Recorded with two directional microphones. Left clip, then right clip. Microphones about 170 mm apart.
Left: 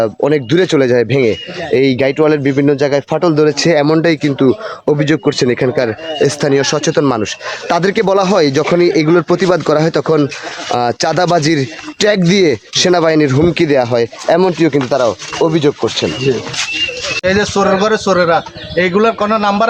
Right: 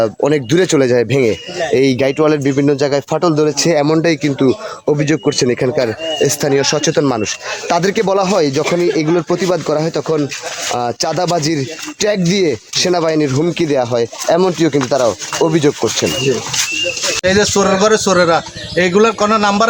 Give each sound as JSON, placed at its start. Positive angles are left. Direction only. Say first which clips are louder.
{"t": 0.0, "sound": "speech", "louder": "left 1 dB", "side_deg": 5}
{"t": 17.2, "sound": "speech", "louder": "even", "side_deg": -10}